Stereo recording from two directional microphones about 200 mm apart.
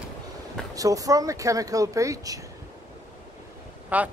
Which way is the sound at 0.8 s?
15° right (ahead or behind).